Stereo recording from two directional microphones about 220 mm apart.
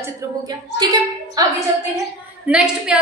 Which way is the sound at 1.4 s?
15° right (ahead or behind).